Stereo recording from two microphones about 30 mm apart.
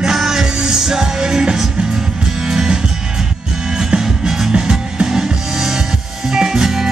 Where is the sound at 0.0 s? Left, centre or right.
Centre.